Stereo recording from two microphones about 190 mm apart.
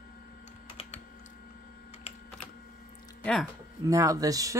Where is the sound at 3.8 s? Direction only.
15° right (ahead or behind).